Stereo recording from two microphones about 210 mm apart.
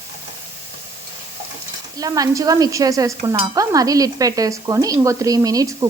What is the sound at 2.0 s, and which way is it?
A woman's voice, 15° right (ahead or behind).